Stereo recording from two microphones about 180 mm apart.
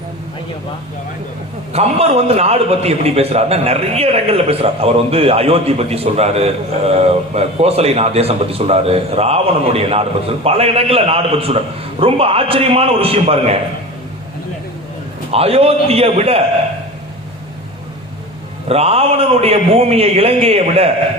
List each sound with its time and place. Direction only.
1.7 s a man's voice: 35° right (ahead or behind)
15.3 s a man's voice: 35° right (ahead or behind)
18.7 s a man's voice: 35° right (ahead or behind)